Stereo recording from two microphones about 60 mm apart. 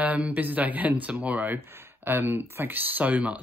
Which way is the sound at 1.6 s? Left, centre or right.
Right.